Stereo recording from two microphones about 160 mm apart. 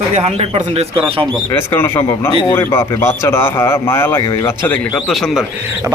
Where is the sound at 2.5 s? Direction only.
15° left (ahead or behind).